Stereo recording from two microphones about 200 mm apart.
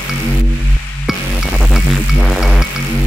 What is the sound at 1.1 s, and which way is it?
Music, 5° right (ahead or behind).